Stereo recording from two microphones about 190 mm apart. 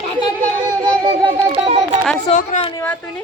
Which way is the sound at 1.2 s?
30° right (ahead or behind).